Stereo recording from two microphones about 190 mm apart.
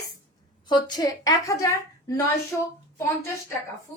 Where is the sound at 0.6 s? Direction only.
20° left (ahead or behind).